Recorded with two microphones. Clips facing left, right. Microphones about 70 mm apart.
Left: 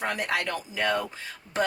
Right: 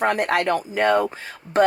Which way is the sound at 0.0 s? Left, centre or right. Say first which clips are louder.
Right 8 dB; right.